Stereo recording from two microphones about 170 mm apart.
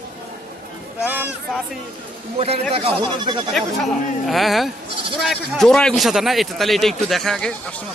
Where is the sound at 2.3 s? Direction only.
35° right (ahead or behind).